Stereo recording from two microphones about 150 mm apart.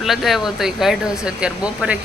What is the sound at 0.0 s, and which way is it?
Speech, centre (ahead or behind).